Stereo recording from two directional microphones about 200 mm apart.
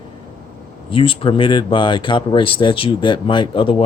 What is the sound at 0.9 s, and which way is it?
Speech, 25° left (ahead or behind).